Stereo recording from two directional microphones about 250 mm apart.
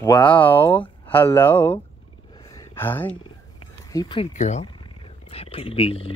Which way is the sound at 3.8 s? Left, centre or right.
Centre.